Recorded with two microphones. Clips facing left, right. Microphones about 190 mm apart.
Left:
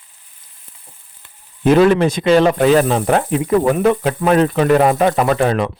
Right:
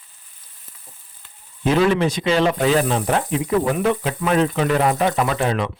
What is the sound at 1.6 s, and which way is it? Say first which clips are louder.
Speech: left 6 dB; 55° left (ahead or behind).